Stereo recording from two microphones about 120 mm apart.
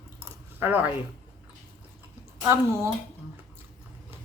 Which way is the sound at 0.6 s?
15° right (ahead or behind).